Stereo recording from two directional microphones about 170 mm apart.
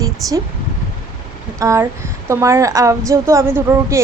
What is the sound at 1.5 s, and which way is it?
A woman's voice, 20° right (ahead or behind).